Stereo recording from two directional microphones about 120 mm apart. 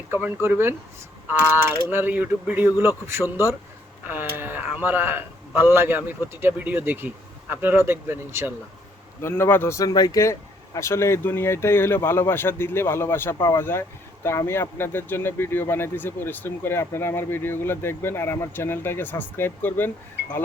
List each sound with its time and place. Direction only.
0.1 s speech: 20° right (ahead or behind)
1.9 s speech: 15° right (ahead or behind)
9.2 s speech: 20° left (ahead or behind)